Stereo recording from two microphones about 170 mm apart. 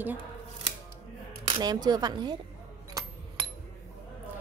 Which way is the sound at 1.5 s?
30° right (ahead or behind).